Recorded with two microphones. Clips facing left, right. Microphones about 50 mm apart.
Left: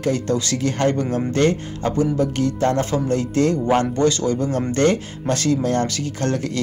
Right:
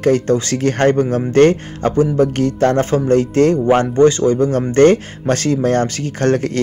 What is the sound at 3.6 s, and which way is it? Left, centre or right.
Speech, right.